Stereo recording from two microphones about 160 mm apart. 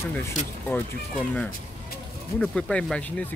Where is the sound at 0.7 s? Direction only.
15° left (ahead or behind).